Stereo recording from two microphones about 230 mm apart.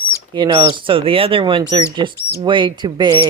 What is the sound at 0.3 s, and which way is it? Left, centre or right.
Speech, right.